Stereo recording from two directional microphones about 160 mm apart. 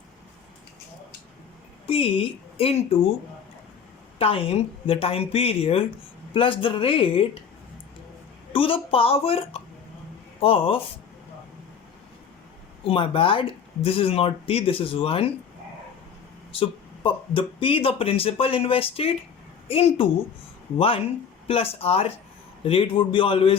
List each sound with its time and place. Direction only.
1.9 s speech: 35° left (ahead or behind)
4.2 s speech: 35° left (ahead or behind)
8.5 s speech: 35° left (ahead or behind)
12.8 s speech: 35° left (ahead or behind)
16.5 s speech: 35° left (ahead or behind)